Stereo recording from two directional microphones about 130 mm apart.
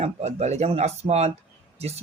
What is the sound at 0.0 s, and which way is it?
A woman's voice, 55° right (ahead or behind).